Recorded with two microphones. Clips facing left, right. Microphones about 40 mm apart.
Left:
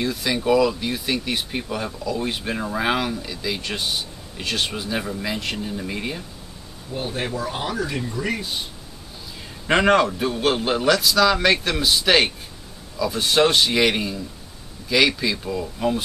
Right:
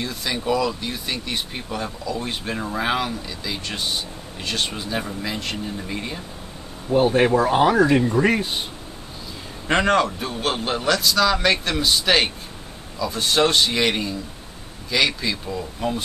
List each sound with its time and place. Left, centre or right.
0.0 s speech: centre
6.9 s speech: right
9.7 s speech: centre